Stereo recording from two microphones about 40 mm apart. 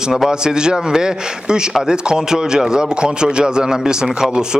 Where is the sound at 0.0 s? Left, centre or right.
Centre.